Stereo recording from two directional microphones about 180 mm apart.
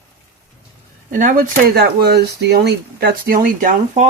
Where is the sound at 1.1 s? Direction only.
45° right (ahead or behind).